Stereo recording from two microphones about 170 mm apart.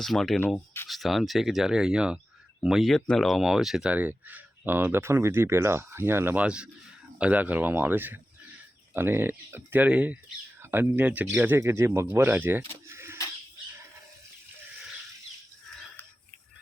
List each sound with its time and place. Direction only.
0.0 s speech: centre (ahead or behind)
0.9 s speech: centre (ahead or behind)
12.9 s a sound: 15° right (ahead or behind)